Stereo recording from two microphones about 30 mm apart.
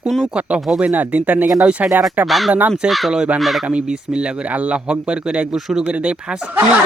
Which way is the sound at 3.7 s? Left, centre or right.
Right.